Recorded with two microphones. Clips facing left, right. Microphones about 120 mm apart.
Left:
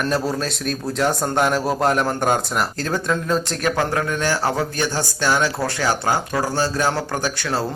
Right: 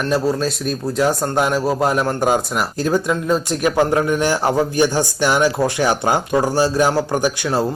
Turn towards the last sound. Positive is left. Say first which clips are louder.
# right 5 dB
turn(degrees=-15)  # may be behind; listen again after turning